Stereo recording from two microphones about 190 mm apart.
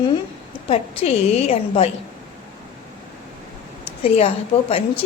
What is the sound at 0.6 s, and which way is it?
A woman's voice, 30° left (ahead or behind).